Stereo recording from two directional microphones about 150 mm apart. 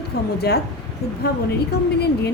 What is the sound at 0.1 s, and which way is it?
Speech, 90° left.